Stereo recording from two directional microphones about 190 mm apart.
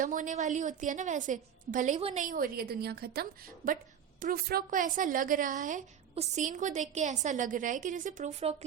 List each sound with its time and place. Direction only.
0.0 s a woman's voice: 45° right (ahead or behind)